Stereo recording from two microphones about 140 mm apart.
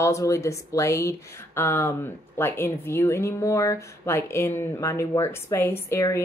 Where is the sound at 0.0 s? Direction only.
20° left (ahead or behind).